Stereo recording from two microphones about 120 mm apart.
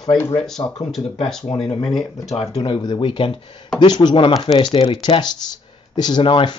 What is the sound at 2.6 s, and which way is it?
Speech, 35° left (ahead or behind).